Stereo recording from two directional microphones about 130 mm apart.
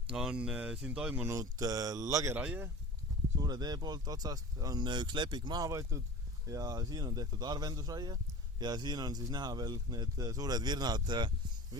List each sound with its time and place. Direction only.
0.1 s speech: 5° right (ahead or behind)
1.4 s speech: 25° right (ahead or behind)
2.4 s speech: 10° right (ahead or behind)
3.4 s speech: 30° right (ahead or behind)